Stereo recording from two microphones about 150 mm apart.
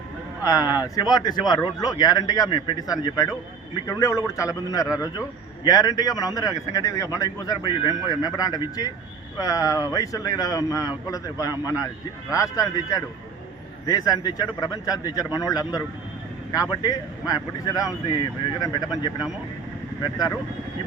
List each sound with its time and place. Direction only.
0.4 s speech: 25° left (ahead or behind)